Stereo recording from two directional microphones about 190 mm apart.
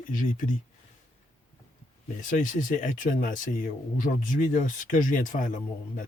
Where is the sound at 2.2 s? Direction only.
45° left (ahead or behind).